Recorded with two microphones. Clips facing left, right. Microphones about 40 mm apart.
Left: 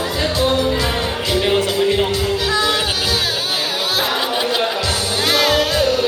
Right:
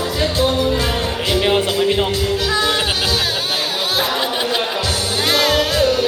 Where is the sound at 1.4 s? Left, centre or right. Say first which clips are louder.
Even; centre.